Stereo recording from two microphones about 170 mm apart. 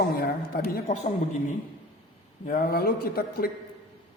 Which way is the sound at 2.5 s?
60° left (ahead or behind).